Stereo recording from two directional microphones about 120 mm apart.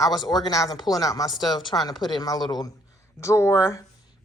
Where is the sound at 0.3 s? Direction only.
35° left (ahead or behind).